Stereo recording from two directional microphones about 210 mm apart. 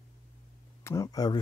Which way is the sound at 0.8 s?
15° left (ahead or behind).